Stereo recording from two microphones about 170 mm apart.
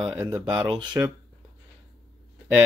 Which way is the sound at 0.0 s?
10° right (ahead or behind).